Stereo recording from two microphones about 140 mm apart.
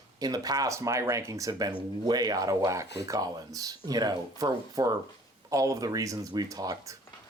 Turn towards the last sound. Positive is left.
turn(degrees=-25)  # may be behind; listen again after turning